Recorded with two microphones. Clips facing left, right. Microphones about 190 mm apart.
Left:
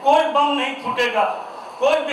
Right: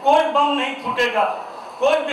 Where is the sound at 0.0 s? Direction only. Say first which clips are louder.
Even; centre (ahead or behind).